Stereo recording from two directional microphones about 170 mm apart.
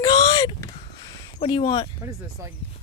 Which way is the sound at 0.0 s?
25° left (ahead or behind).